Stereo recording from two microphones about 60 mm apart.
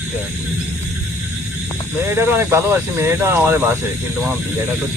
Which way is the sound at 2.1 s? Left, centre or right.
Right.